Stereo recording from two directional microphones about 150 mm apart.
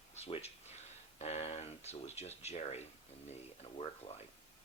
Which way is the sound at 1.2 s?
45° left (ahead or behind).